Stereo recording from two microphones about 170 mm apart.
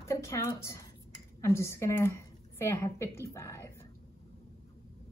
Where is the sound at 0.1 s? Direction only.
15° left (ahead or behind).